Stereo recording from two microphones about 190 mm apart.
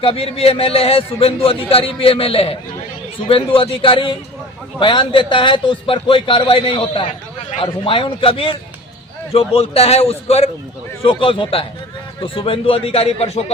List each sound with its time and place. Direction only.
0.0 s a man's voice: 30° left (ahead or behind)